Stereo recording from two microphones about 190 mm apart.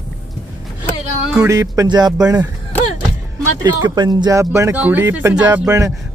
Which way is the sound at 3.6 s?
20° right (ahead or behind).